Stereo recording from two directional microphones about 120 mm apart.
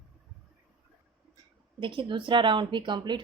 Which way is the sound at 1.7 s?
45° right (ahead or behind).